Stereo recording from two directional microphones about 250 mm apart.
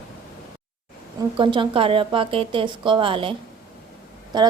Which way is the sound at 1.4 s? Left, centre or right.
Centre.